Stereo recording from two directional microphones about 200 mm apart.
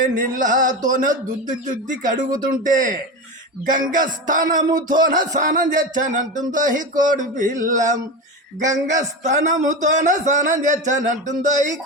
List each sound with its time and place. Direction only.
0.0 s speech: 40° right (ahead or behind)